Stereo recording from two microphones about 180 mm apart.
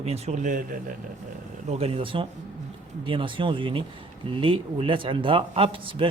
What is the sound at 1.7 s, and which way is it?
Speech, 35° right (ahead or behind).